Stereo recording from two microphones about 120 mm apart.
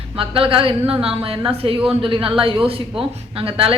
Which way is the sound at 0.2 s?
50° right (ahead or behind).